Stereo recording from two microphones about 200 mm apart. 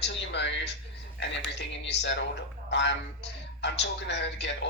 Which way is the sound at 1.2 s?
60° left (ahead or behind).